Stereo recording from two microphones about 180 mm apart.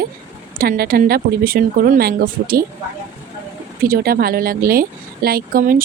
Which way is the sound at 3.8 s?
55° right (ahead or behind).